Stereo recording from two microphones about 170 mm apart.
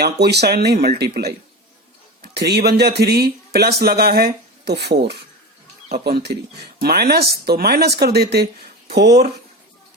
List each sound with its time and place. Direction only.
0.0 s speech: 75° right (ahead or behind)
6.1 s speech: 70° right (ahead or behind)